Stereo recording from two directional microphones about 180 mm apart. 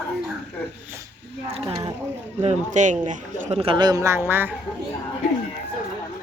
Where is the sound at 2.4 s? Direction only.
40° right (ahead or behind); by 4.5 s 10° right (ahead or behind).